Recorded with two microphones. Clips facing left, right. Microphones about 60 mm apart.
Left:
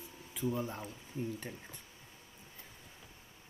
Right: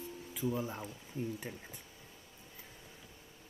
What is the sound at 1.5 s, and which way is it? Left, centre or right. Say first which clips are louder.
Speech: right 1 dB; centre.